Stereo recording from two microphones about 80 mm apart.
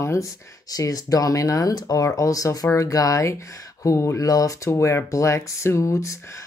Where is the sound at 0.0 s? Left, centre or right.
Left.